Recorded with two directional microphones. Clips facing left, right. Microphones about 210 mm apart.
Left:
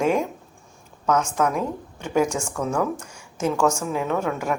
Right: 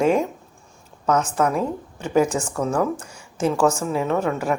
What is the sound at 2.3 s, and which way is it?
Speech, centre (ahead or behind).